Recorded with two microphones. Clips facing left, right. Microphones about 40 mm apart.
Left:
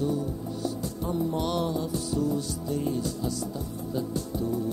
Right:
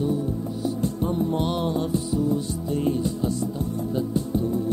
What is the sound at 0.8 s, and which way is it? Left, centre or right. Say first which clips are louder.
Music: right 7 dB; right.